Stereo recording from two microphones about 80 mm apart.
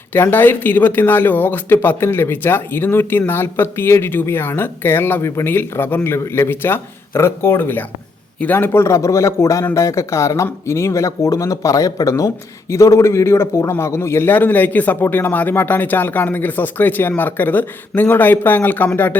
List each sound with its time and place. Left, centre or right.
0.1 s speech: left